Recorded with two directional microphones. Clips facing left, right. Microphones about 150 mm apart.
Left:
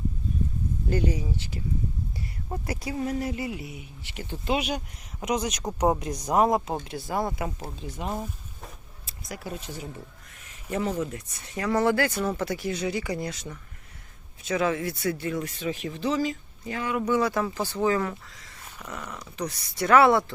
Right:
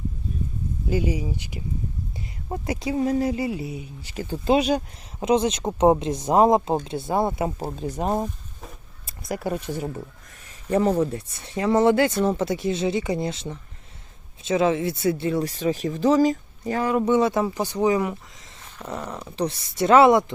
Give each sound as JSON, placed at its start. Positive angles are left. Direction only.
{"t": 0.9, "sound": "speech", "side_deg": -10}
{"t": 7.7, "sound": "speech", "side_deg": -45}
{"t": 9.0, "sound": "speech", "side_deg": -55}
{"t": 17.1, "sound": "speech", "side_deg": -25}